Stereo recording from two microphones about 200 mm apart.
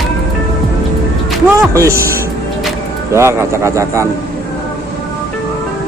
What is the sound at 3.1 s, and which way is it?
Speech, 15° right (ahead or behind).